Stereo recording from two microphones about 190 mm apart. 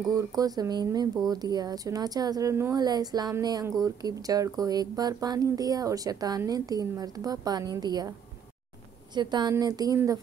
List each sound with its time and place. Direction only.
0.1 s speech: 20° right (ahead or behind)
9.1 s speech: 20° right (ahead or behind)